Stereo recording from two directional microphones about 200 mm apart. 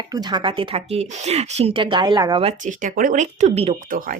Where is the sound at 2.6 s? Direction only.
40° right (ahead or behind).